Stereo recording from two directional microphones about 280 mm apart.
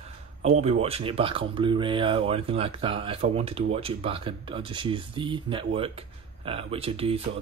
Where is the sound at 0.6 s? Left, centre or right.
Right.